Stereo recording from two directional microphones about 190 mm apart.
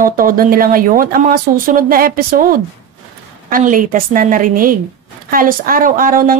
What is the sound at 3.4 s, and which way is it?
A woman's voice, 45° right (ahead or behind).